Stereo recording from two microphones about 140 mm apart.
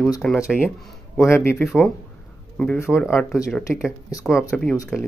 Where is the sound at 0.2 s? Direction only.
5° left (ahead or behind).